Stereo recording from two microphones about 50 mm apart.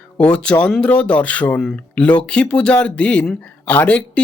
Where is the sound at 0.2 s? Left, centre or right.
Left.